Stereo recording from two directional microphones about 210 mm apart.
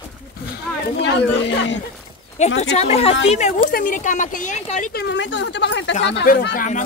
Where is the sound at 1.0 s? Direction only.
55° left (ahead or behind).